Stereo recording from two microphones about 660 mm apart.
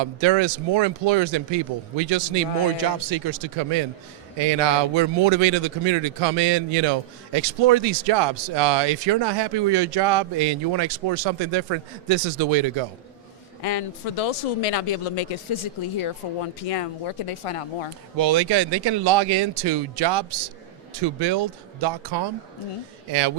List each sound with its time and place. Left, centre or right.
0.0 s a man's voice: right
13.6 s speech: left
18.2 s speech: right